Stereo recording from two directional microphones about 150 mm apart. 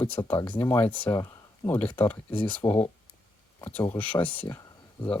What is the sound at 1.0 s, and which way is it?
Speech, 25° left (ahead or behind).